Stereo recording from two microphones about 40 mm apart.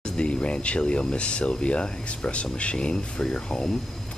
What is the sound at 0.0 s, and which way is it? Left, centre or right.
Speech, left.